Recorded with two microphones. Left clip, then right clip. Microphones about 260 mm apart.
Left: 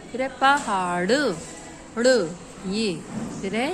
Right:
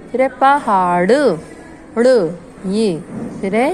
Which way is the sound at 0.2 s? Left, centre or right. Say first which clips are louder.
Right 8 dB; right.